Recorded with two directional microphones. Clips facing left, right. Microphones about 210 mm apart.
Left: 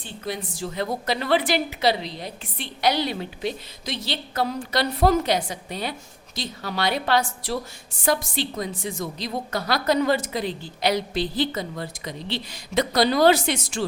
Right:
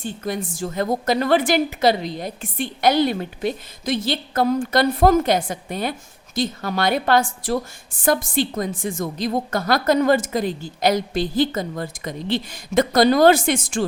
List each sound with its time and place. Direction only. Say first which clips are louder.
0.0 s a woman's voice: right 5 dB; 50° right (ahead or behind)